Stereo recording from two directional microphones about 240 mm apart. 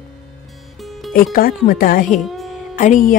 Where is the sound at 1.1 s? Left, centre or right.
Left.